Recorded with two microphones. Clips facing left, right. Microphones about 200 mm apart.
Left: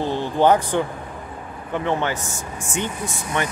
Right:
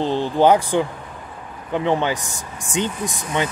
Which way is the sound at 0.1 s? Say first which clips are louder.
Right 2 dB; 10° right (ahead or behind).